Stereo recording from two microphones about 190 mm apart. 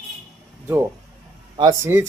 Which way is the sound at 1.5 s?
25° right (ahead or behind).